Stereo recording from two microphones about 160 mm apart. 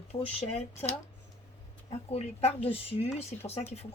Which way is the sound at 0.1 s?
40° left (ahead or behind).